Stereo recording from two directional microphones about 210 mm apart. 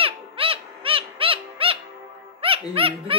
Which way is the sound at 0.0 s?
25° right (ahead or behind).